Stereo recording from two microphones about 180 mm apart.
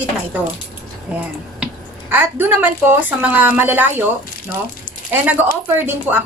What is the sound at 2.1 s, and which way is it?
A woman's voice, 10° right (ahead or behind).